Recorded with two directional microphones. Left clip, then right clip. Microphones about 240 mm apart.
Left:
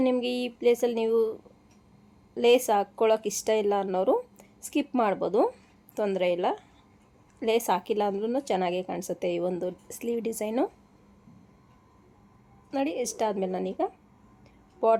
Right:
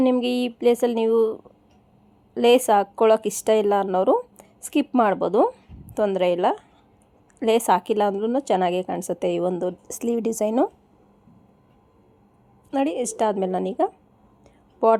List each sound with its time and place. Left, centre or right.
0.0 s a woman's voice: centre
12.7 s a woman's voice: right